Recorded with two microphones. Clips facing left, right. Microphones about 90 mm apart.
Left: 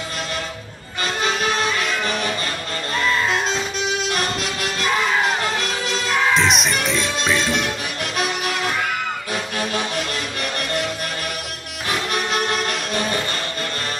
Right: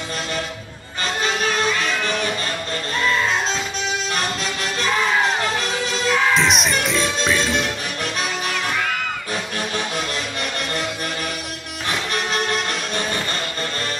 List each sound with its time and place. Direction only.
3.0 s music: centre (ahead or behind)
6.3 s music: centre (ahead or behind)